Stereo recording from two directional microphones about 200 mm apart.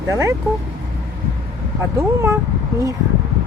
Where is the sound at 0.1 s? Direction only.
15° right (ahead or behind).